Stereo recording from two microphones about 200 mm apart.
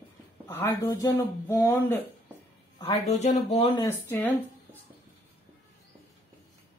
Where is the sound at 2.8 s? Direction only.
30° left (ahead or behind).